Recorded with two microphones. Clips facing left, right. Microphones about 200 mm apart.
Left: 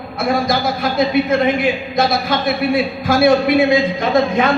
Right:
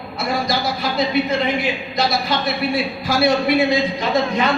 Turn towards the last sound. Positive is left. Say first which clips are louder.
# left 4 dB
turn(degrees=50)  # may be behind; listen again after turning